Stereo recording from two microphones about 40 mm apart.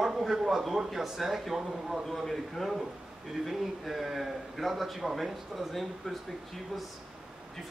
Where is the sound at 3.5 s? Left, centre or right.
Centre.